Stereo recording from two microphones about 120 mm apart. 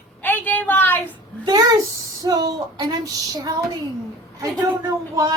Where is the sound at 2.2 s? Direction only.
30° right (ahead or behind).